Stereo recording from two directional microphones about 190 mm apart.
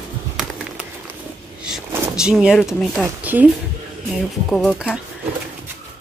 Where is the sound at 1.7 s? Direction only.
5° right (ahead or behind).